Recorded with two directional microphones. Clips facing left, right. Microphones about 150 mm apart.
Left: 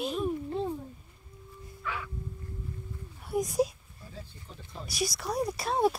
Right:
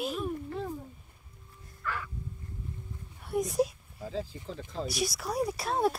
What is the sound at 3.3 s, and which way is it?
Speech, centre (ahead or behind).